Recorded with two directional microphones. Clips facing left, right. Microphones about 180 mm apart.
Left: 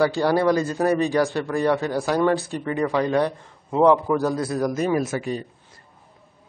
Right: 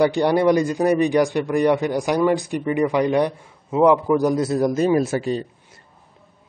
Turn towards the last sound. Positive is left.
turn(degrees=-30)  # may be behind; listen again after turning